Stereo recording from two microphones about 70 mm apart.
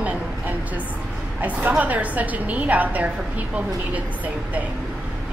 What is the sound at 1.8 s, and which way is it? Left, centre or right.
A woman's voice, right.